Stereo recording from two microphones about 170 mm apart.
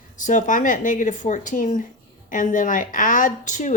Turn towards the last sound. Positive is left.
turn(degrees=45)  # may be behind; listen again after turning